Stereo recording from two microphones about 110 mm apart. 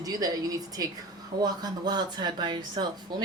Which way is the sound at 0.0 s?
35° right (ahead or behind).